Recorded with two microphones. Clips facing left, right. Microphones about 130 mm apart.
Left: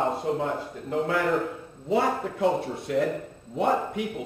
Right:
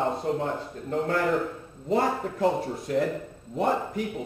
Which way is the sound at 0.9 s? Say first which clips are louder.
Left 1 dB; 40° right (ahead or behind).